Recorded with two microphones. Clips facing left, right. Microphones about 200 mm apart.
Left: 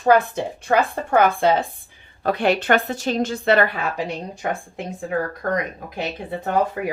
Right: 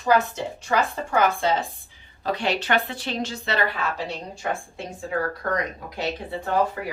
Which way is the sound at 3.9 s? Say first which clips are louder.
Left 4 dB; 15° left (ahead or behind).